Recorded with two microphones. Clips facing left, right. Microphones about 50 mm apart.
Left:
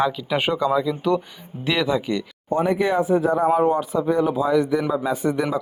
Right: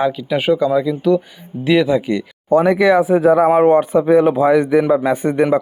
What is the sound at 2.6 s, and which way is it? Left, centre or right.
Speech, right.